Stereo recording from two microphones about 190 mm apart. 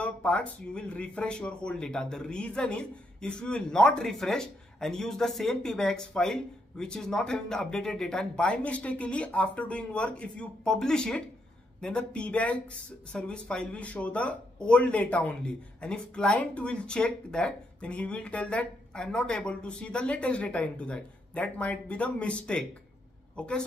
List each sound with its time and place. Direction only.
0.0 s a woman's voice: 5° left (ahead or behind)